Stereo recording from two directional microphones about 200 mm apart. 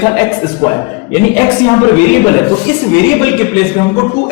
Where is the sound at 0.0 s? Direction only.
15° left (ahead or behind).